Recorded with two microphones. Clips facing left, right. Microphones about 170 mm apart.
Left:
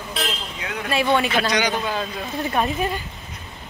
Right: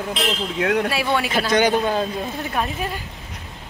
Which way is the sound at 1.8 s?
35° right (ahead or behind).